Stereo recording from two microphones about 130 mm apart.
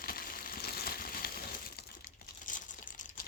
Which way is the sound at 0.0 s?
90° left.